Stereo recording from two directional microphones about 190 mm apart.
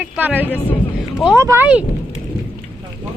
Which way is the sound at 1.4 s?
15° right (ahead or behind).